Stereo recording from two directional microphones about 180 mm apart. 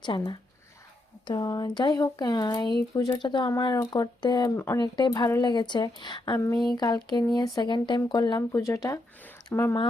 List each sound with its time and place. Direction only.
0.1 s speech: 25° left (ahead or behind)
1.3 s speech: 20° left (ahead or behind)
4.5 s speech: 15° left (ahead or behind)
4.8 s speech: 25° left (ahead or behind)